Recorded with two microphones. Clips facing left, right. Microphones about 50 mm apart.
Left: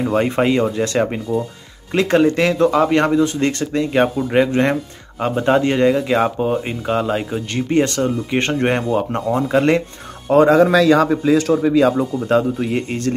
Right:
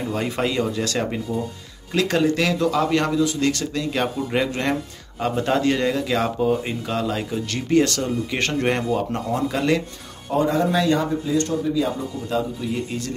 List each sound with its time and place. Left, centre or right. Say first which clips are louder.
0.0 s speech: left 7 dB; left
10.3 s a man's voice: left 9 dB; left